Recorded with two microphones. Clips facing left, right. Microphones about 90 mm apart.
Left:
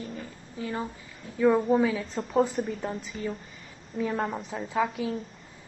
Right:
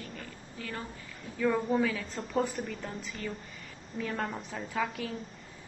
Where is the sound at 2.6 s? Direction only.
35° left (ahead or behind).